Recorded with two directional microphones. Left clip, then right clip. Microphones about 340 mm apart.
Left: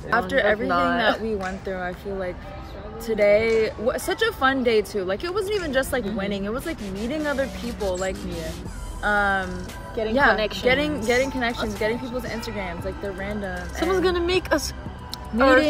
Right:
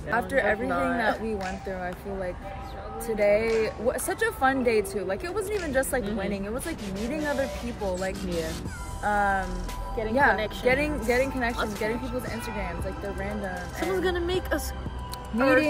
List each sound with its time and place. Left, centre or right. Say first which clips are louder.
0.1 s speech: left 4 dB; centre
7.9 s speech: left 3 dB; centre
9.0 s speech: left 3 dB; centre
13.7 s speech: left 6 dB; left